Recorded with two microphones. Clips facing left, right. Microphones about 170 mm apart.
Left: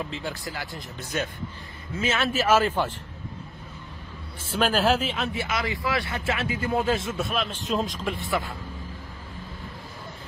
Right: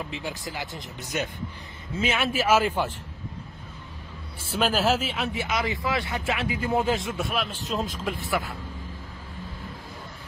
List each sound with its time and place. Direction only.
0.1 s speech: 15° right (ahead or behind)
4.4 s speech: 5° right (ahead or behind)